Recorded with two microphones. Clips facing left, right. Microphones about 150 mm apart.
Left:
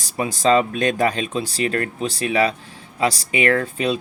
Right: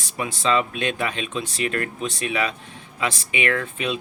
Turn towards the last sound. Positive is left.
turn(degrees=35)  # may be behind; listen again after turning